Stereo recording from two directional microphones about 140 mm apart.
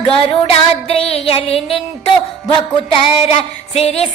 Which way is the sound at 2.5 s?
40° left (ahead or behind).